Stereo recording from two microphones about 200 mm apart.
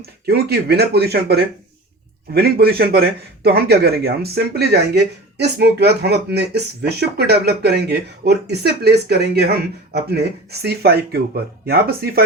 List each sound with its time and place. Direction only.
0.0 s speech: 50° right (ahead or behind)